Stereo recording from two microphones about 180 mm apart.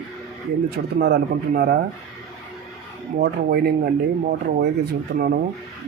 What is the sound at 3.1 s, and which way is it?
Speech, 65° right (ahead or behind).